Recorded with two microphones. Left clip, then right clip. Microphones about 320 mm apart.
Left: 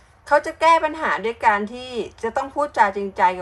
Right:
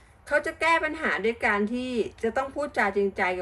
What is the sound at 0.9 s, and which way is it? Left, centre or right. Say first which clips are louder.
A woman's voice: left 4 dB; centre.